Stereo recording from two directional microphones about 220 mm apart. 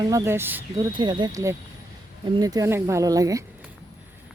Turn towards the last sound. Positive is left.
turn(degrees=-15)  # may be behind; listen again after turning